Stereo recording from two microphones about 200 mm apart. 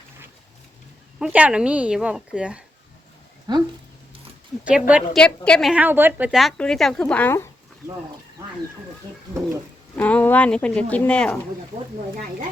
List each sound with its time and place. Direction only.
1.2 s a woman's voice: 5° right (ahead or behind)
3.5 s speech: 20° right (ahead or behind)
4.6 s a woman's voice: 5° right (ahead or behind); by 7.5 s 10° left (ahead or behind)
8.4 s speech: 15° right (ahead or behind)
9.9 s speech: 5° left (ahead or behind)